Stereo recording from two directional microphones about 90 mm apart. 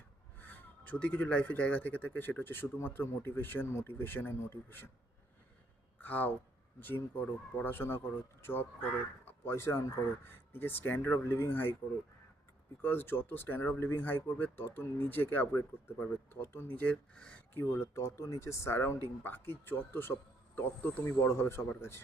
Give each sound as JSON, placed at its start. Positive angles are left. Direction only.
{"t": 0.3, "sound": "speech", "side_deg": 20}
{"t": 6.0, "sound": "speech", "side_deg": 20}
{"t": 12.8, "sound": "speech", "side_deg": 25}
{"t": 17.5, "sound": "speech", "side_deg": 25}